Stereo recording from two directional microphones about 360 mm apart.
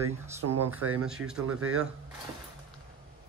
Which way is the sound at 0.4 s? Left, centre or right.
Right.